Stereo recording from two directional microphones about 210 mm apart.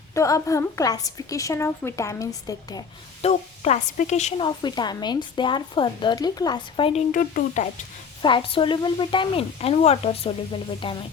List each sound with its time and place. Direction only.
0.1 s a woman's voice: 15° left (ahead or behind)
3.2 s a woman's voice: 30° left (ahead or behind)
4.4 s speech: 20° left (ahead or behind)
7.1 s a woman's voice: 40° left (ahead or behind)
8.2 s speech: 25° left (ahead or behind)